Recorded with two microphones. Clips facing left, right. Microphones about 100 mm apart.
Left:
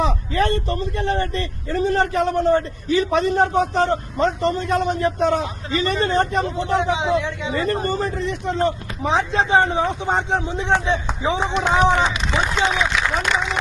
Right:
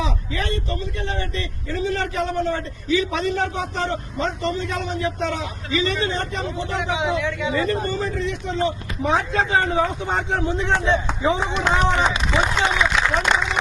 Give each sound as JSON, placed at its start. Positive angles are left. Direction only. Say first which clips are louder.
{"t": 0.0, "sound": "speech", "louder": "left 6 dB", "side_deg": 50}
{"t": 6.7, "sound": "speech", "louder": "left 4 dB", "side_deg": 30}
{"t": 7.7, "sound": "speech", "louder": "left 2 dB", "side_deg": 45}
{"t": 9.0, "sound": "speech", "louder": "left 2 dB", "side_deg": 20}